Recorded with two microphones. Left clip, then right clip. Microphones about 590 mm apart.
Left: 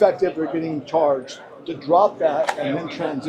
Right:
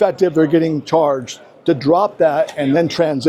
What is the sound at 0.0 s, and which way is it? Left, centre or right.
Speech, right.